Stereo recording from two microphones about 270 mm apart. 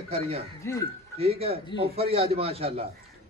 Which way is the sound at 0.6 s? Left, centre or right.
Centre.